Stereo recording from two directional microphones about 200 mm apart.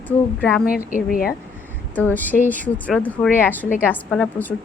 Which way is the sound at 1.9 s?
10° left (ahead or behind).